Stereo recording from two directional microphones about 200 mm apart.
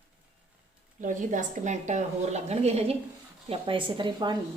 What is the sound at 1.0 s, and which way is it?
A woman's voice, 40° right (ahead or behind).